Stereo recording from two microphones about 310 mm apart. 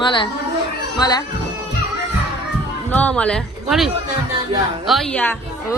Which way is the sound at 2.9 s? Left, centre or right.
Centre.